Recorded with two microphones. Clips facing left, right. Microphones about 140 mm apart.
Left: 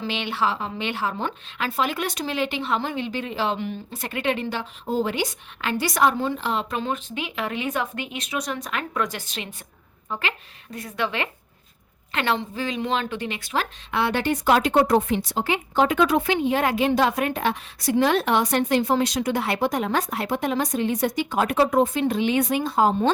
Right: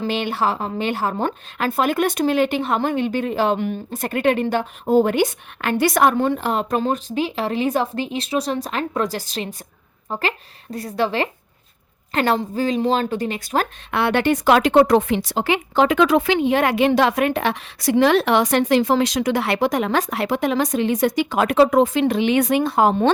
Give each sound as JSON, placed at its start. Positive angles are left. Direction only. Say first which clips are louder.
{"t": 0.0, "sound": "speech", "louder": "right 4 dB", "side_deg": -45}
{"t": 13.9, "sound": "speech", "louder": "right 5 dB", "side_deg": -65}